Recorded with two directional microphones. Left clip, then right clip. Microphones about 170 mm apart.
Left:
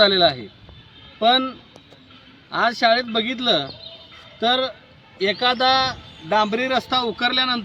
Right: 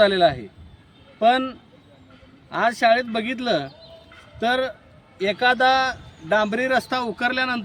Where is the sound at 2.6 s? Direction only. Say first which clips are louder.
Even; 35° right (ahead or behind).